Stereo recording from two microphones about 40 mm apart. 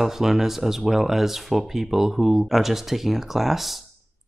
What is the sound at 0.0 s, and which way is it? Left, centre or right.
Speech, centre.